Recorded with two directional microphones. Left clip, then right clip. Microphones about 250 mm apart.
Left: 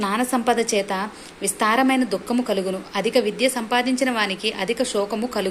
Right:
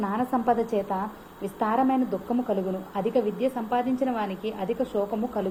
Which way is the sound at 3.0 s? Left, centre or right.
Centre.